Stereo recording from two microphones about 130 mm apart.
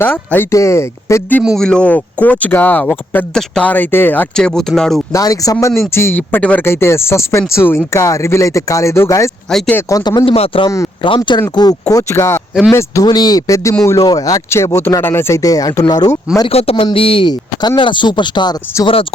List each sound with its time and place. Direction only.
0.0 s speech: 15° left (ahead or behind)
1.5 s speech: 5° left (ahead or behind)
5.1 s speech: 25° left (ahead or behind)
9.5 s speech: 5° left (ahead or behind)
10.0 s speech: 35° left (ahead or behind)
10.3 s speech: 50° left (ahead or behind)
11.0 s speech: 35° left (ahead or behind)
16.5 s speech: 50° left (ahead or behind)